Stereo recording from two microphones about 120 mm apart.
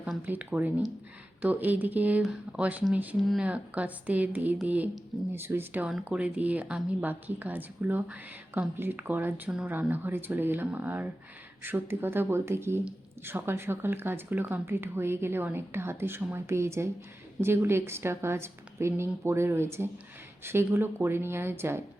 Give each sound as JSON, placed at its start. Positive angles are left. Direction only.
{"t": 0.0, "sound": "speech", "side_deg": -10}